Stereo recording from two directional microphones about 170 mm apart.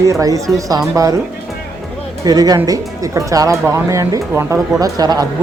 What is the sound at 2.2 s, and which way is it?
Speech, 20° right (ahead or behind).